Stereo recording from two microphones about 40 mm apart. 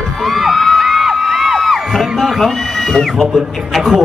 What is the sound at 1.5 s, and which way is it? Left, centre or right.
Crowd, centre.